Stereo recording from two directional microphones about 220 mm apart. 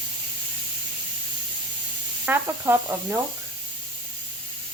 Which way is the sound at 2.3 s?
10° right (ahead or behind).